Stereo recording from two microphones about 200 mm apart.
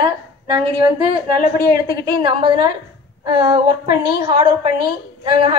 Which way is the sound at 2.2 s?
25° right (ahead or behind).